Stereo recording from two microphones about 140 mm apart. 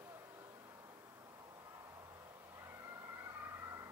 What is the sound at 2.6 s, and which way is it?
Vehicle, 20° right (ahead or behind).